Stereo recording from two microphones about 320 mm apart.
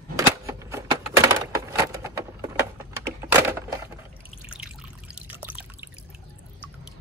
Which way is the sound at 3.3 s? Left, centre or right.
Centre.